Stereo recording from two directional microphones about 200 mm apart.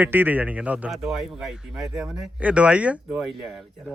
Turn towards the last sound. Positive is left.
turn(degrees=-5)  # may be behind; listen again after turning